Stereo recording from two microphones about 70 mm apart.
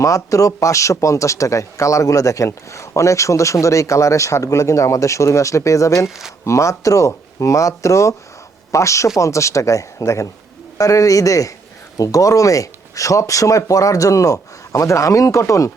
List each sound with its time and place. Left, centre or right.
0.0 s speech: left